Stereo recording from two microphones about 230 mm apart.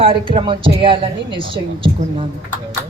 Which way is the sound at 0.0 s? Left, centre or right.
Right.